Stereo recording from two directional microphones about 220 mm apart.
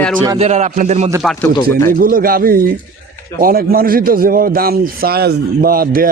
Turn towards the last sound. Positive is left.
turn(degrees=-40)  # may be behind; listen again after turning